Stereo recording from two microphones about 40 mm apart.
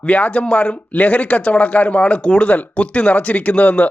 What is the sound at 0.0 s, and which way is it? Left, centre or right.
Speech, left.